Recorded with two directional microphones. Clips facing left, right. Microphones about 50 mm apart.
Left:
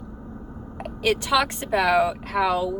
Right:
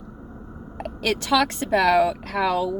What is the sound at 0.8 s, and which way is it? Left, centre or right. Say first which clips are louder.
A woman's voice: left 2 dB; centre.